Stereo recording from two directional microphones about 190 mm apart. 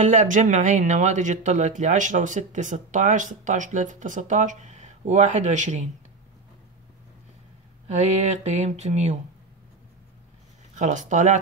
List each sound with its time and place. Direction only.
0.0 s speech: 40° right (ahead or behind)
7.9 s speech: 35° right (ahead or behind)
10.7 s speech: 40° right (ahead or behind)